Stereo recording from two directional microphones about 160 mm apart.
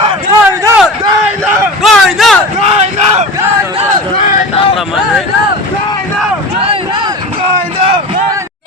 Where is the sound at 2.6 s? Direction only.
45° right (ahead or behind).